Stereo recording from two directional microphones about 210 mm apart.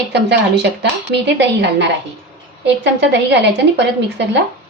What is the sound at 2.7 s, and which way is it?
A woman's voice, 55° right (ahead or behind).